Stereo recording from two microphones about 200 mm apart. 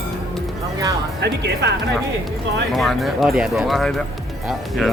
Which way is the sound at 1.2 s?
60° right (ahead or behind).